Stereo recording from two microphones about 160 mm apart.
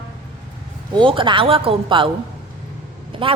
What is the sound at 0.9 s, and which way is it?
Speech, 30° right (ahead or behind).